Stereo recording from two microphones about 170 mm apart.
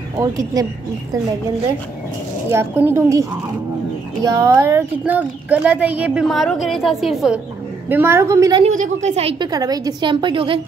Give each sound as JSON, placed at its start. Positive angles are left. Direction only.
{"t": 0.2, "sound": "a woman's voice", "side_deg": -20}
{"t": 2.5, "sound": "a woman's voice", "side_deg": -15}
{"t": 7.9, "sound": "speech", "side_deg": -15}
{"t": 8.6, "sound": "a woman's voice", "side_deg": -45}
{"t": 9.5, "sound": "a woman's voice", "side_deg": -20}